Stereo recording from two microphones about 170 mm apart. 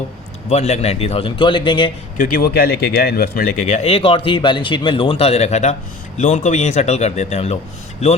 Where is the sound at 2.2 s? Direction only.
60° left (ahead or behind).